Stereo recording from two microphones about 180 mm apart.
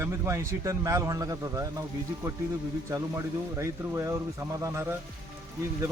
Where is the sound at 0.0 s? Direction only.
15° right (ahead or behind).